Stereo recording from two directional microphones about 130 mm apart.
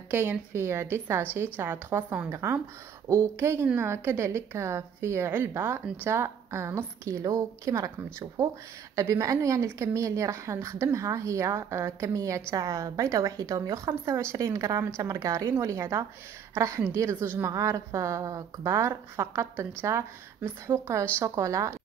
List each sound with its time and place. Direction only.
0.1 s speech: 15° right (ahead or behind)